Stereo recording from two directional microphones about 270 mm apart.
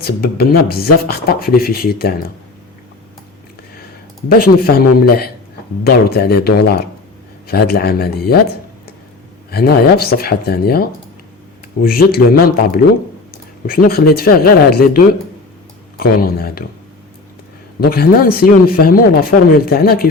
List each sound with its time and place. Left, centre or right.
0.0 s speech: left
4.3 s speech: left
9.5 s speech: left
17.7 s speech: left